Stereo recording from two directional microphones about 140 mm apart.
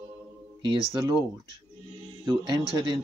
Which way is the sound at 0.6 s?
35° right (ahead or behind).